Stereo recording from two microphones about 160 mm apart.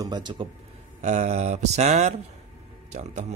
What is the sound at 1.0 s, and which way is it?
Speech, 45° right (ahead or behind).